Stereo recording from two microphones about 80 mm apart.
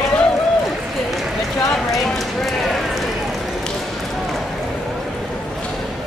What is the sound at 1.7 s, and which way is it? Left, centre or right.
Clip-clop, centre.